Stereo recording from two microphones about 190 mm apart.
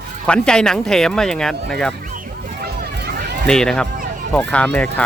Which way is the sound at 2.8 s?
60° right (ahead or behind).